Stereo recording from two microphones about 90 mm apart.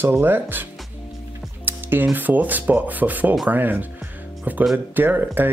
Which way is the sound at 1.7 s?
25° right (ahead or behind).